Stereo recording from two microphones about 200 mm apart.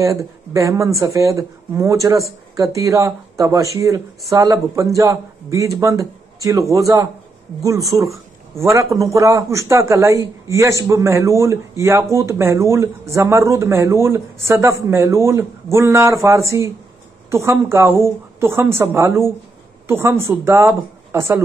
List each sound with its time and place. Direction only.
0.0 s speech: 15° right (ahead or behind)